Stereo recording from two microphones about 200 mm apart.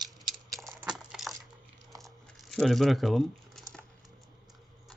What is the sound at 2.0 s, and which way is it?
Crumpling, centre (ahead or behind).